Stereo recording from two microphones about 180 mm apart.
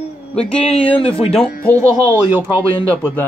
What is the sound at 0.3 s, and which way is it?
Speech, 5° left (ahead or behind).